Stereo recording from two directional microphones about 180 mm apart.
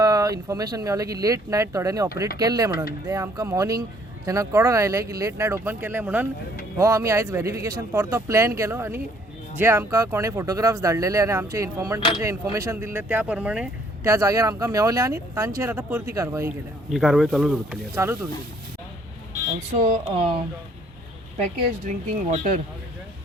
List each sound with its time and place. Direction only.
0.0 s speech: 20° right (ahead or behind)
11.9 s speech: 30° left (ahead or behind)
12.2 s speech: 15° right (ahead or behind)
16.9 s speech: centre (ahead or behind)
19.7 s speech: 45° right (ahead or behind)
21.8 s speech: 45° right (ahead or behind)